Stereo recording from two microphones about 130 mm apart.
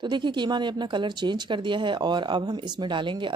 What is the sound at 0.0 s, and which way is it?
Speech, 35° right (ahead or behind).